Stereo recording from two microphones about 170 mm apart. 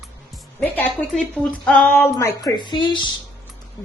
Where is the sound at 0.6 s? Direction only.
10° left (ahead or behind).